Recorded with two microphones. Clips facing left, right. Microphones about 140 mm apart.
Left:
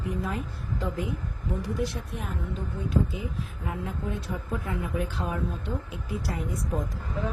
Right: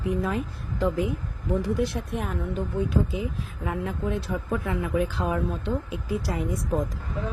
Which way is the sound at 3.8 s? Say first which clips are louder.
Right 5 dB; 90° right.